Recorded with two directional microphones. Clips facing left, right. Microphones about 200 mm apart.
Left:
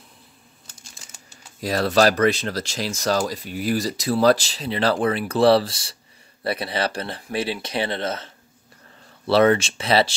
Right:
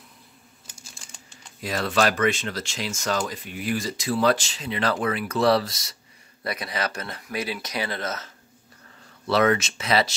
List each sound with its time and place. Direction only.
1.6 s speech: 35° left (ahead or behind)
9.3 s speech: 30° left (ahead or behind)